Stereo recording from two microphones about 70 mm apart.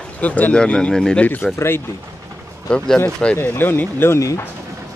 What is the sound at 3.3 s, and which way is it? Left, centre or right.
Speech, left.